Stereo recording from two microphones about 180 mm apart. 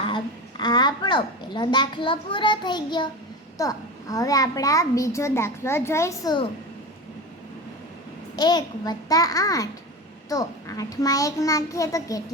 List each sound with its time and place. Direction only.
0.1 s a woman's voice: 25° left (ahead or behind)
8.4 s a child's voice: 25° left (ahead or behind)